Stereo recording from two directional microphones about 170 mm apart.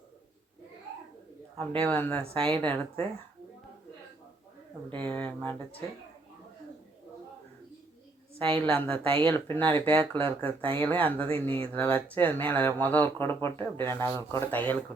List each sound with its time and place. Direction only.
1.8 s speech: 10° left (ahead or behind)
2.3 s a woman's voice: 35° right (ahead or behind)
5.0 s speech: 10° left (ahead or behind)
8.4 s a woman's voice: 30° right (ahead or behind)
9.5 s speech: 10° left (ahead or behind)
10.6 s speech: 30° right (ahead or behind)
10.8 s speech: 10° left (ahead or behind)